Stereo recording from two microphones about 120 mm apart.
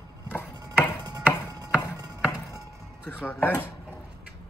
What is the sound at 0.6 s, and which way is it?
Music, 35° right (ahead or behind).